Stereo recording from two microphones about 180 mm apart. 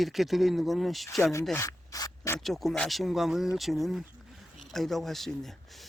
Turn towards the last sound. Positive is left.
turn(degrees=0)  # may be behind; listen again after turning